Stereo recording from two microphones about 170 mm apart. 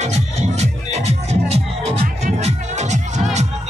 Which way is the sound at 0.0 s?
40° right (ahead or behind).